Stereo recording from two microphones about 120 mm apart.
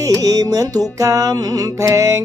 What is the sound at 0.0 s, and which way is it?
Music, 30° right (ahead or behind).